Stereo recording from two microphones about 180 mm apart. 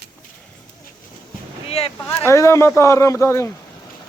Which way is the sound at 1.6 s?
35° left (ahead or behind).